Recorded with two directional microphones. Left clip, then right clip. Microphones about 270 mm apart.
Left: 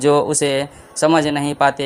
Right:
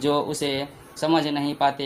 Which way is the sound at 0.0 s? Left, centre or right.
Left.